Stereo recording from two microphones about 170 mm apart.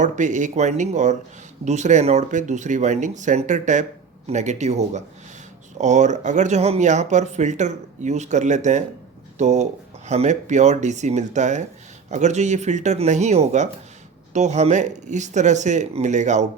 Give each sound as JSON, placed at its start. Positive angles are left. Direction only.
{"t": 0.0, "sound": "speech", "side_deg": -45}